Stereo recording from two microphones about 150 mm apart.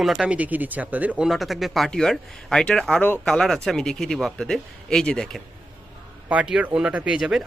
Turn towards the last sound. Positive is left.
turn(degrees=-5)  # may be behind; listen again after turning